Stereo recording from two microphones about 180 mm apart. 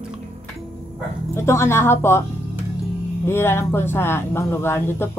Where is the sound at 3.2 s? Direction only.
15° left (ahead or behind).